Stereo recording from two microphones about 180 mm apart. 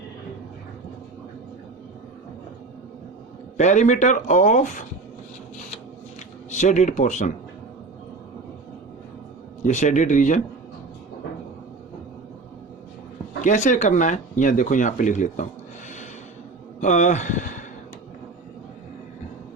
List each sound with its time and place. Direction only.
3.6 s speech: 40° left (ahead or behind)
6.5 s speech: 40° left (ahead or behind)
9.6 s speech: 40° left (ahead or behind)
13.4 s speech: 45° left (ahead or behind)
16.8 s speech: 40° left (ahead or behind)